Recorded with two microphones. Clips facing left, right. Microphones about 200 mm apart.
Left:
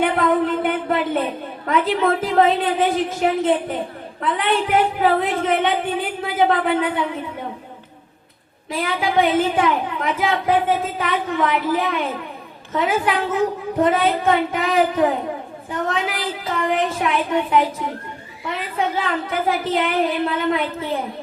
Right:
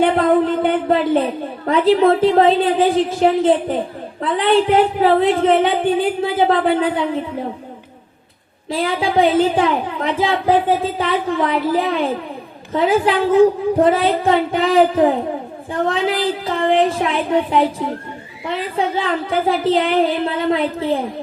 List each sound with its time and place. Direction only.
0.0 s a sound: 30° right (ahead or behind)
1.6 s speech: 30° right (ahead or behind)
8.7 s a woman's voice: 30° right (ahead or behind)